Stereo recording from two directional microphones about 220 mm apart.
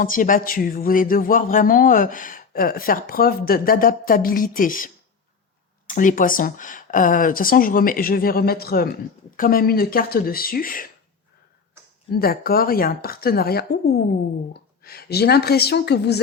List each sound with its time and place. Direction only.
0.0 s speech: 40° left (ahead or behind)
5.9 s speech: 35° left (ahead or behind)
12.1 s a woman's voice: 45° left (ahead or behind)